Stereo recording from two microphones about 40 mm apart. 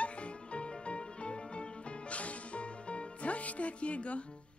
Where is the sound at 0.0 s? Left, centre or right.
Left.